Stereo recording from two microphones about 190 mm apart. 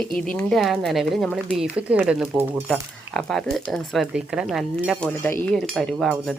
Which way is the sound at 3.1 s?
5° left (ahead or behind).